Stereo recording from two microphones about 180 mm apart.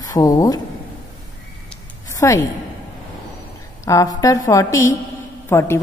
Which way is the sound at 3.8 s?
20° left (ahead or behind).